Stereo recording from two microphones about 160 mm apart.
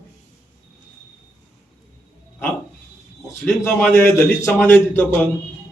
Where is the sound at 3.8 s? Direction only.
10° left (ahead or behind).